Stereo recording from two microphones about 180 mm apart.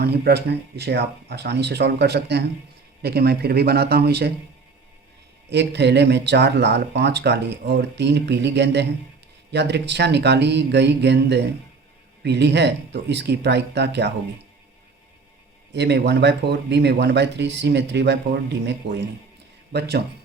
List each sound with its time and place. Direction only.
0.0 s speech: 65° right (ahead or behind)
5.5 s speech: 70° right (ahead or behind)
15.7 s speech: 70° right (ahead or behind)